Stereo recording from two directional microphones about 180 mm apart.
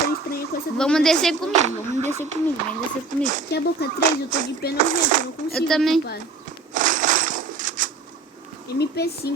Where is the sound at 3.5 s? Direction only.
65° left (ahead or behind).